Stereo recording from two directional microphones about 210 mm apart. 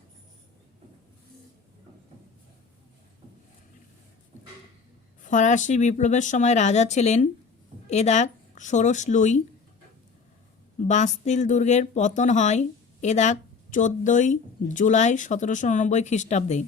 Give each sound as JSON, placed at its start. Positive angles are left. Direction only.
{"t": 5.2, "sound": "speech", "side_deg": 35}
{"t": 10.8, "sound": "speech", "side_deg": 35}